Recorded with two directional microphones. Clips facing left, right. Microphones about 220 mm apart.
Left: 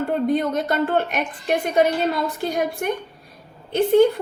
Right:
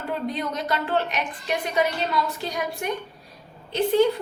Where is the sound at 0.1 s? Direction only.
50° left (ahead or behind).